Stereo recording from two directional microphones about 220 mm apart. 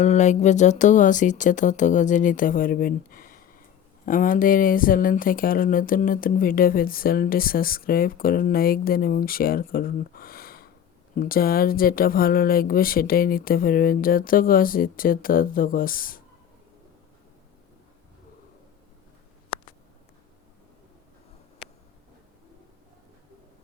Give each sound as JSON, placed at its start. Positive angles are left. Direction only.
{"t": 0.0, "sound": "speech", "side_deg": 30}